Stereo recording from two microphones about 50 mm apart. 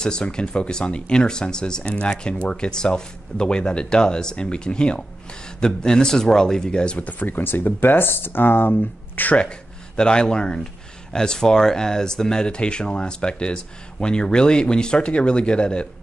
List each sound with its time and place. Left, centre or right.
0.0 s speech: centre
7.0 s speech: left
9.9 s speech: centre